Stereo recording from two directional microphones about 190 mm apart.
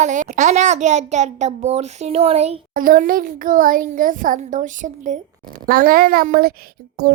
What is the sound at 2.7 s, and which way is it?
Speech, 45° right (ahead or behind).